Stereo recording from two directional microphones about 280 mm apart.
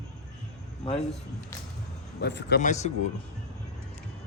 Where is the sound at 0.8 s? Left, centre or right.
Left.